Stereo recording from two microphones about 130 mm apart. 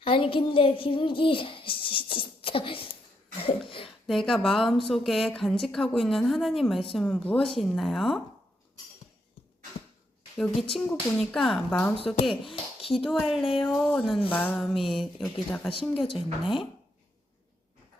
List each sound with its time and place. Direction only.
0.0 s speech: 45° left (ahead or behind)
3.3 s cough: 45° left (ahead or behind)
4.0 s a woman's voice: centre (ahead or behind)
10.3 s a woman's voice: 5° left (ahead or behind)
11.7 s speech: 15° left (ahead or behind)
12.3 s a sound: 45° left (ahead or behind)
12.9 s a woman's voice: centre (ahead or behind)
16.0 s speech: 45° left (ahead or behind)
16.4 s a woman's voice: 5° right (ahead or behind)